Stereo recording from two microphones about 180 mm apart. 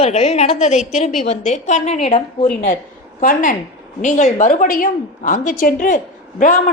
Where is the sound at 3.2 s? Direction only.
50° left (ahead or behind).